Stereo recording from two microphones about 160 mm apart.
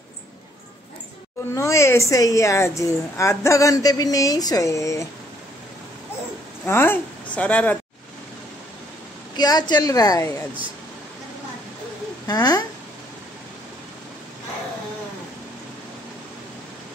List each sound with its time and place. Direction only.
1.5 s a woman's voice: 20° left (ahead or behind)
6.6 s speech: 15° left (ahead or behind)
9.4 s a woman's voice: 25° left (ahead or behind)
12.3 s a woman's voice: 25° left (ahead or behind)